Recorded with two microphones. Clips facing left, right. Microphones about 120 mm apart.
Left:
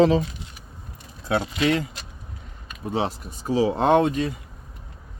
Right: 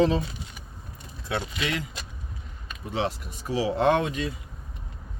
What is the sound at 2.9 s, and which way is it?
Speech, 35° left (ahead or behind).